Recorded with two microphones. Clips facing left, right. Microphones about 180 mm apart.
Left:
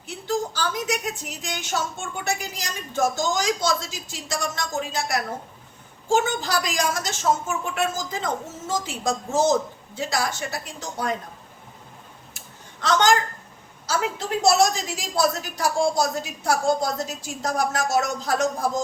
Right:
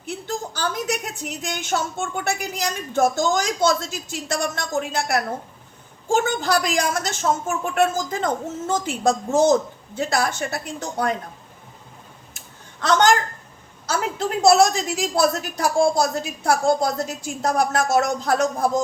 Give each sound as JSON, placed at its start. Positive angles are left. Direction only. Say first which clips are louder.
{"t": 0.0, "sound": "a sound", "louder": "left 2 dB", "side_deg": -50}
{"t": 1.4, "sound": "a woman's voice", "louder": "right 5 dB", "side_deg": -55}
{"t": 13.8, "sound": "a woman's voice", "louder": "right 2 dB", "side_deg": -55}